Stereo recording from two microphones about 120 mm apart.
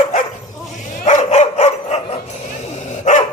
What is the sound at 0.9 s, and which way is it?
Dog, 85° left.